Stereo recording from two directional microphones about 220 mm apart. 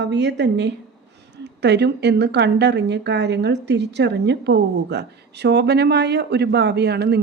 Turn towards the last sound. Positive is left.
turn(degrees=-50)  # may be behind; listen again after turning